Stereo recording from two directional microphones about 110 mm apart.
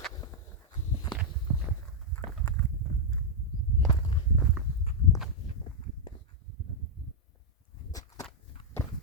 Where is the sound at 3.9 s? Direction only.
45° left (ahead or behind).